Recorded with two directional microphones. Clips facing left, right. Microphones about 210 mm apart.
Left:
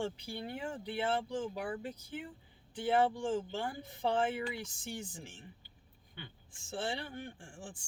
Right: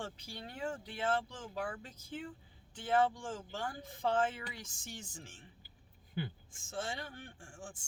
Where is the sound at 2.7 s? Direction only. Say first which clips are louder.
Left 2 dB; 15° left (ahead or behind).